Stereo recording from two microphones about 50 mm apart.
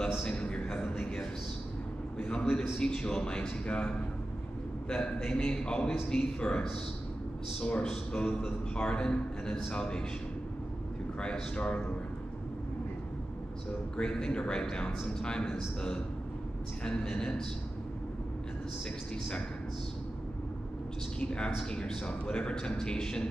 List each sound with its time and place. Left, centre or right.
0.1 s a sound: centre
2.8 s a man's voice: centre
11.1 s a man's voice: centre
13.9 s a man's voice: centre
21.2 s a man's voice: left